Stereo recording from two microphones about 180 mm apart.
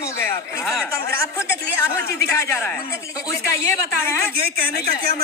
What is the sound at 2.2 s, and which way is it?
A woman's voice, 10° left (ahead or behind).